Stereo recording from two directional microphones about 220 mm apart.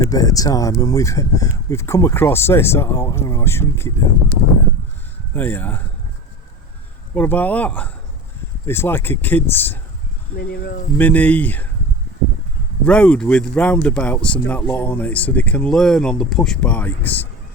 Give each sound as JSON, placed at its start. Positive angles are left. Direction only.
{"t": 0.0, "sound": "speech", "side_deg": 15}
{"t": 7.1, "sound": "speech", "side_deg": 10}
{"t": 10.3, "sound": "speech", "side_deg": 45}
{"t": 10.9, "sound": "speech", "side_deg": 5}
{"t": 12.8, "sound": "speech", "side_deg": 5}